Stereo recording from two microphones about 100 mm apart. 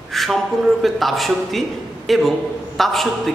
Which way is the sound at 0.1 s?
Centre (ahead or behind).